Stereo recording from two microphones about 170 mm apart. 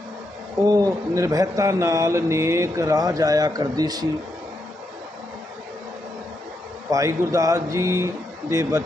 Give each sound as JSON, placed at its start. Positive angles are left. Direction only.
{"t": 0.6, "sound": "speech", "side_deg": -20}
{"t": 6.9, "sound": "speech", "side_deg": -20}